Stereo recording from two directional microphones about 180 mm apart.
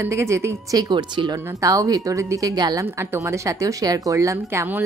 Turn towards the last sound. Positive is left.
turn(degrees=-10)  # may be behind; listen again after turning